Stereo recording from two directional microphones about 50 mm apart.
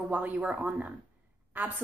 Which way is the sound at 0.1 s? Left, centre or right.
Right.